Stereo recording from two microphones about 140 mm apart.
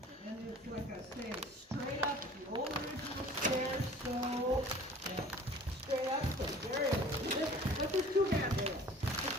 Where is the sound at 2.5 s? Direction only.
35° right (ahead or behind).